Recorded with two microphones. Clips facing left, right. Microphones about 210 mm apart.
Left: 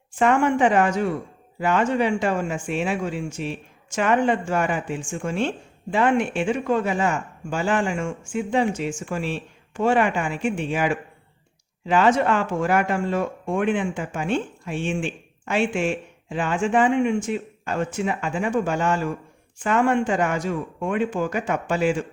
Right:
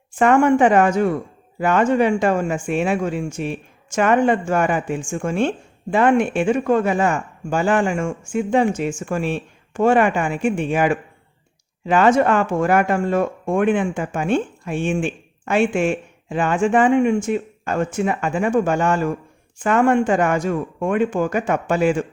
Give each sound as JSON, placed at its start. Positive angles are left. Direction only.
{"t": 0.2, "sound": "speech", "side_deg": -50}